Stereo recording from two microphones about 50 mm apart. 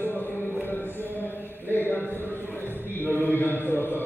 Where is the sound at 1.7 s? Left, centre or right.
Left.